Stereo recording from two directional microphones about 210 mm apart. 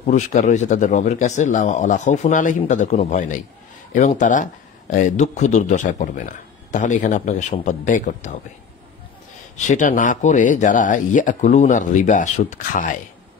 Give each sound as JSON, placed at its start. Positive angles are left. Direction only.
{"t": 0.0, "sound": "speech", "side_deg": 35}
{"t": 9.7, "sound": "speech", "side_deg": 35}